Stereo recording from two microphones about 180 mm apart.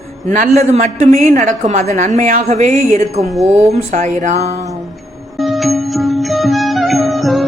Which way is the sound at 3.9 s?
45° right (ahead or behind).